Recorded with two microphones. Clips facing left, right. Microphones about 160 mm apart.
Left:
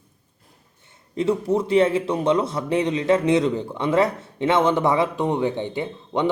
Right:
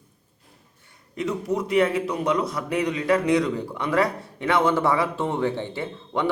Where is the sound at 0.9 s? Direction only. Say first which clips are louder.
Left 6 dB; 30° left (ahead or behind).